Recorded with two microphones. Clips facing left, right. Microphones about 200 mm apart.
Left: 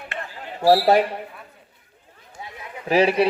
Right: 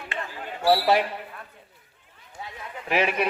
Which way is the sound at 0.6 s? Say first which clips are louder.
Left 5 dB; 40° left (ahead or behind).